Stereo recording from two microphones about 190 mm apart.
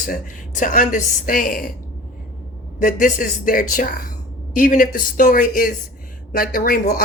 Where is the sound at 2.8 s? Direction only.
45° left (ahead or behind).